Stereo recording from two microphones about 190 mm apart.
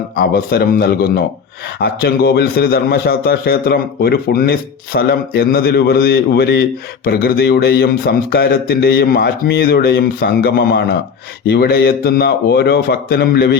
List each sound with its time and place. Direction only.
0.2 s a man's voice: 55° left (ahead or behind)